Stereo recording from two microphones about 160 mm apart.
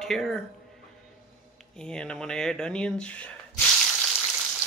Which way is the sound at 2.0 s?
5° left (ahead or behind).